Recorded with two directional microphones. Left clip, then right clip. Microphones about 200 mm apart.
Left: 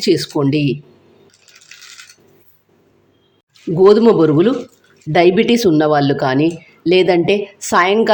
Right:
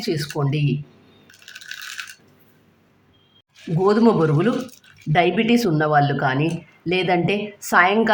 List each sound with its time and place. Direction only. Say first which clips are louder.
0.0 s speech: left 10 dB; 25° left (ahead or behind)
3.8 s speech: left 8 dB; 20° left (ahead or behind)